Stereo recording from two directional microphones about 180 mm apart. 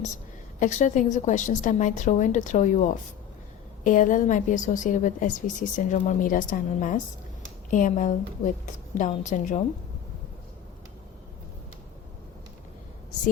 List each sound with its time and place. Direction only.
0.6 s a woman's voice: 40° left (ahead or behind)